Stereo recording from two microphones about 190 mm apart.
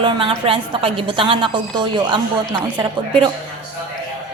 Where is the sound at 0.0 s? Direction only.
25° right (ahead or behind).